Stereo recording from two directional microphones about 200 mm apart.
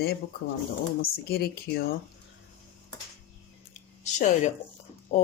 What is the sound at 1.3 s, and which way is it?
Speech, 50° left (ahead or behind).